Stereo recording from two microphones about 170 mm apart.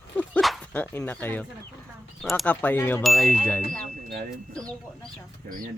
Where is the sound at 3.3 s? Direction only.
10° left (ahead or behind).